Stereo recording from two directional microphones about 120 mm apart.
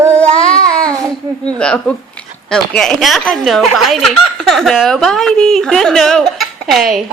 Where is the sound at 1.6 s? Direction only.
10° left (ahead or behind).